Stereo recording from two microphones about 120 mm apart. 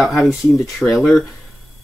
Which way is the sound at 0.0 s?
Centre (ahead or behind).